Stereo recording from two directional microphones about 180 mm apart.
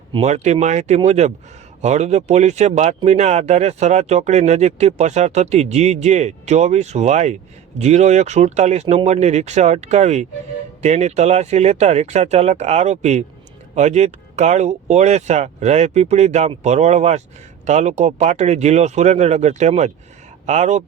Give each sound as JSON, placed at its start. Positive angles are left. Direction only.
{"t": 0.1, "sound": "speech", "side_deg": -35}